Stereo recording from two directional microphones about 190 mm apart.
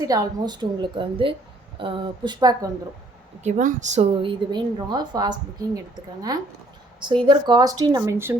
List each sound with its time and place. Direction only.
0.0 s a woman's voice: 20° right (ahead or behind)
3.4 s a woman's voice: 40° right (ahead or behind); by 8.4 s 15° right (ahead or behind)